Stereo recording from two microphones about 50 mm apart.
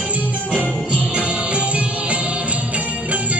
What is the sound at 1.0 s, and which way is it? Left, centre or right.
Music, right.